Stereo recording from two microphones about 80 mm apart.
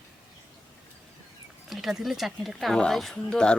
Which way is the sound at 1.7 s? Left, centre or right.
Centre.